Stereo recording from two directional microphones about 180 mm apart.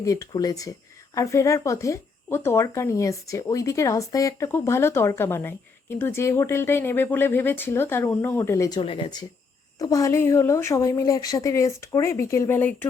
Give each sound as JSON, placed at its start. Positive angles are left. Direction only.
{"t": 0.0, "sound": "speech", "side_deg": 20}
{"t": 8.8, "sound": "speech", "side_deg": 30}